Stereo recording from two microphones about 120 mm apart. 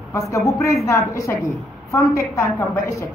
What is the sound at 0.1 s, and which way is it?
A woman's voice, 25° left (ahead or behind).